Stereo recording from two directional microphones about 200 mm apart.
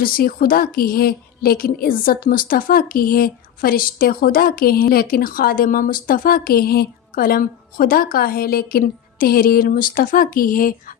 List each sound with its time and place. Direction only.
0.0 s a woman's voice: 45° left (ahead or behind)